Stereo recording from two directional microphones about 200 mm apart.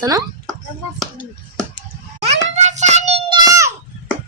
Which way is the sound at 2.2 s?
35° right (ahead or behind).